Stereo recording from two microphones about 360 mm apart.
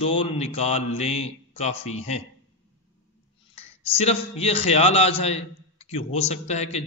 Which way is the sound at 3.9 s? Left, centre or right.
Centre.